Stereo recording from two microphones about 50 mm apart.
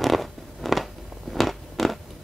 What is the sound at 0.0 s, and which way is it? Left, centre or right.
Zipper, centre.